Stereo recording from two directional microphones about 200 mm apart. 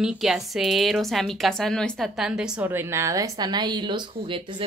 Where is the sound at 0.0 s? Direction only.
Centre (ahead or behind).